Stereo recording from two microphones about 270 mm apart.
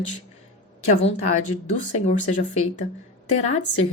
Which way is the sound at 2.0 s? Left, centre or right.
Left.